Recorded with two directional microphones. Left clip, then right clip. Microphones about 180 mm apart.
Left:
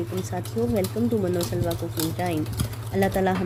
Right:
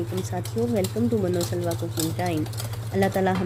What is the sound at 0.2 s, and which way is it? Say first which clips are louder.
A woman's voice: even; centre (ahead or behind).